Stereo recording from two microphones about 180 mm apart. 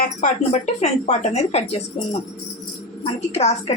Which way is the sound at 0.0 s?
45° left (ahead or behind).